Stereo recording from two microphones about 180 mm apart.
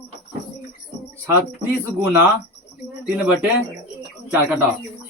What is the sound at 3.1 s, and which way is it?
Speech, 5° right (ahead or behind).